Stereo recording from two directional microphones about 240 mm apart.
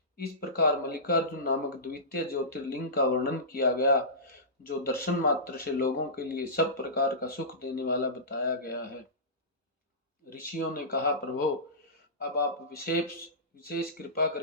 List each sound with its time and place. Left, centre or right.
0.2 s speech: left
10.2 s speech: left